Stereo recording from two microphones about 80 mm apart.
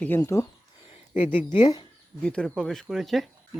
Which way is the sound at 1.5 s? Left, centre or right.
Left.